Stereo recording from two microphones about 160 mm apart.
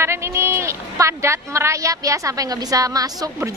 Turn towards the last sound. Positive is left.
turn(degrees=-20)  # may be behind; listen again after turning